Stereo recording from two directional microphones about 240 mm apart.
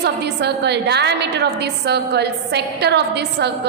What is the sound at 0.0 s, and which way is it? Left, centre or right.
A woman's voice, right.